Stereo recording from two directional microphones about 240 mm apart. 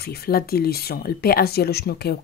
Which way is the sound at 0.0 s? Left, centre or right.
Left.